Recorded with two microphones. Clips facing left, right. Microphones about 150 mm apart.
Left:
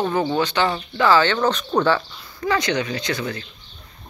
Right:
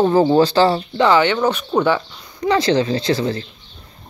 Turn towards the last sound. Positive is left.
turn(degrees=-30)  # may be behind; listen again after turning